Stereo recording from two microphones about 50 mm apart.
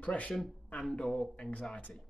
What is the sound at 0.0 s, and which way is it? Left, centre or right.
Speech, left.